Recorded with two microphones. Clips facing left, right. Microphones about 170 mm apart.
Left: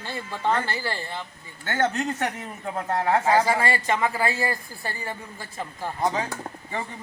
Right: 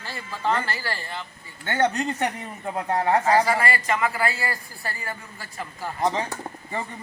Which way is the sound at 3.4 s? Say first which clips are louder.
Even; 25° left (ahead or behind).